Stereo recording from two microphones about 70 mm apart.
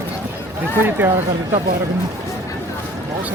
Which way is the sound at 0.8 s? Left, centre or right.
Right.